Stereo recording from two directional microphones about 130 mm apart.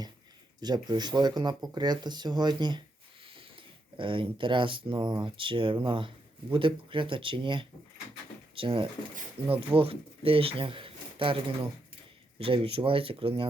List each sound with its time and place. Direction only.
0.6 s speech: 35° right (ahead or behind)